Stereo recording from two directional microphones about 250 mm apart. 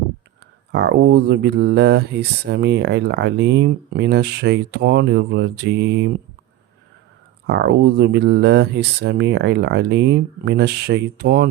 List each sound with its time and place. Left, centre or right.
0.7 s speech: right
7.4 s speech: right